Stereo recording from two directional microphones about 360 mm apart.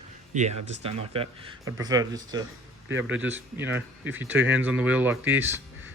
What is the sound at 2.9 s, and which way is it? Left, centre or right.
Speech, right.